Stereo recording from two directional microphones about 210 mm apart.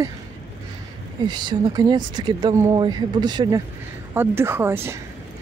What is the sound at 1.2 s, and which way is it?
Speech, 20° right (ahead or behind).